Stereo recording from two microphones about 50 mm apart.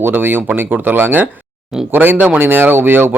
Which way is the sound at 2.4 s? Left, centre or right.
Right.